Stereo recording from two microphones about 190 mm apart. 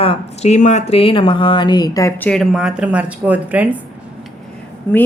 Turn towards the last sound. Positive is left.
turn(degrees=10)  # may be behind; listen again after turning